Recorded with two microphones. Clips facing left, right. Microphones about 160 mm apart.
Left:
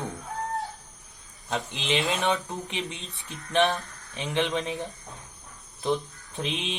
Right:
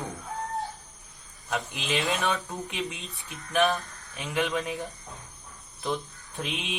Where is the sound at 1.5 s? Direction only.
20° left (ahead or behind).